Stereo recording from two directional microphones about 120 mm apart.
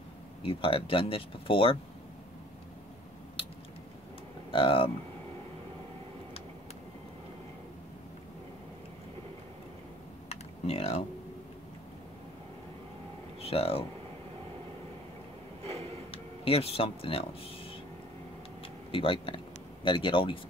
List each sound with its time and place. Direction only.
0.4 s speech: 50° left (ahead or behind)
4.5 s speech: 50° left (ahead or behind)
10.3 s computer keyboard: 60° left (ahead or behind)
13.4 s speech: 55° left (ahead or behind)
16.1 s speech: 55° left (ahead or behind)
18.9 s speech: 45° left (ahead or behind)